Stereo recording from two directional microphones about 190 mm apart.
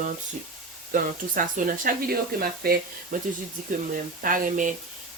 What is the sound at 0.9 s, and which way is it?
Speech, 45° right (ahead or behind).